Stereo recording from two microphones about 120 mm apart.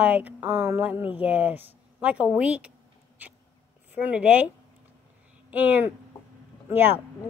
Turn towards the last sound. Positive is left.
turn(degrees=-20)  # may be behind; listen again after turning